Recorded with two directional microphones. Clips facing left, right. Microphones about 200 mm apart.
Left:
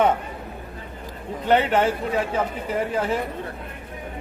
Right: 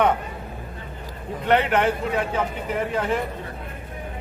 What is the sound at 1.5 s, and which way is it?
Speech, 30° left (ahead or behind).